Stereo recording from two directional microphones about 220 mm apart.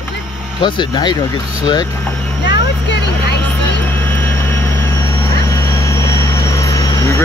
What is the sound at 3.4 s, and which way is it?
Vehicle, 10° left (ahead or behind).